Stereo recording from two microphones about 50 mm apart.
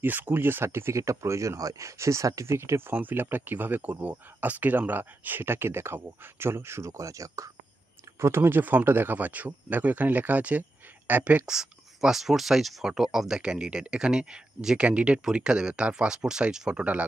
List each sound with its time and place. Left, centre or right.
0.0 s speech: right
0.9 s speech: right
2.9 s speech: right
8.2 s speech: right
11.4 s speech: centre
13.4 s speech: centre